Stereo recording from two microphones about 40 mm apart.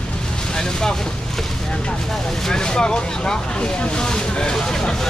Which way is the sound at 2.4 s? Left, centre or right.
Centre.